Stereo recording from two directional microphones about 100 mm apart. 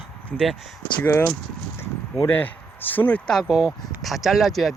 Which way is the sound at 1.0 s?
20° left (ahead or behind).